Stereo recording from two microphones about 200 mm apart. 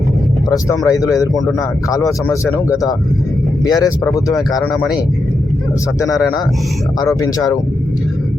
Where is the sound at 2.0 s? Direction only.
10° left (ahead or behind).